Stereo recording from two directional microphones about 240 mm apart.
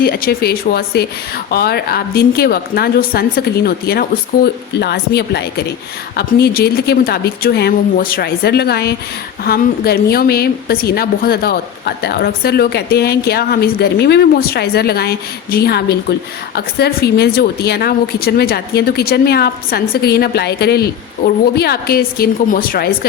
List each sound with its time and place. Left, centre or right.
0.0 s a woman's voice: left